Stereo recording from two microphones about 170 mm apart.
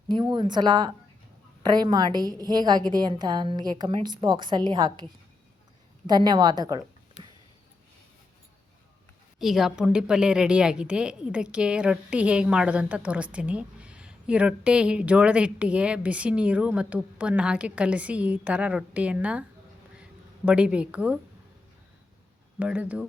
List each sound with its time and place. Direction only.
0.1 s a woman's voice: 25° right (ahead or behind)
6.1 s a woman's voice: 25° right (ahead or behind)
9.4 s a woman's voice: centre (ahead or behind)
22.5 s a woman's voice: 10° right (ahead or behind)